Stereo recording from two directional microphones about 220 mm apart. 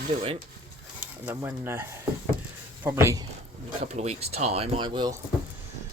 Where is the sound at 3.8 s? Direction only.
30° right (ahead or behind).